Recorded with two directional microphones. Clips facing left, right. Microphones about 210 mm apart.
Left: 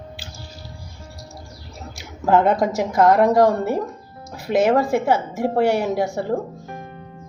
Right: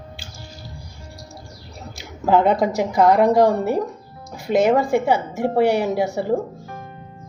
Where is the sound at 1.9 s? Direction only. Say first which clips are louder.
Even; centre (ahead or behind).